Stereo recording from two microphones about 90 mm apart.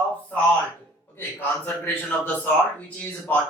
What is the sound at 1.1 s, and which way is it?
A man's voice, 25° left (ahead or behind).